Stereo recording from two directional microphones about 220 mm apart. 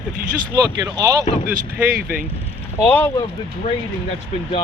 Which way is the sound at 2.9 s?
10° left (ahead or behind).